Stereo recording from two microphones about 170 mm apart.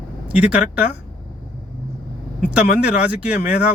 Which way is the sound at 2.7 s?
5° right (ahead or behind).